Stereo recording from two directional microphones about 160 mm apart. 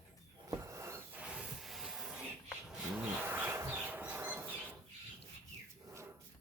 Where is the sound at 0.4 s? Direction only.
20° right (ahead or behind); by 2.1 s centre (ahead or behind).